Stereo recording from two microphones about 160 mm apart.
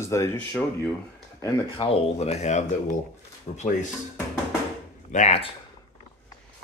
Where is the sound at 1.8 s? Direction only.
40° left (ahead or behind).